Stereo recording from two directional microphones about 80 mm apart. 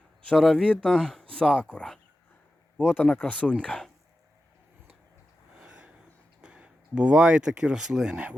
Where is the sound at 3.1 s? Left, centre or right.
Centre.